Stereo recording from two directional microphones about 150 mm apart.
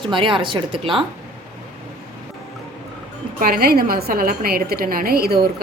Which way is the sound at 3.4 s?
90° right.